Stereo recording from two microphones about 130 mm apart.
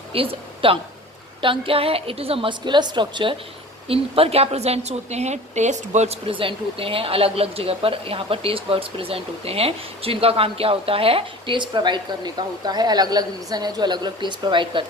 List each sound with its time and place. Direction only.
0.1 s a woman's voice: 45° right (ahead or behind)